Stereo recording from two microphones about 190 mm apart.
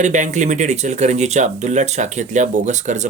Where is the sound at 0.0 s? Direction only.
40° right (ahead or behind).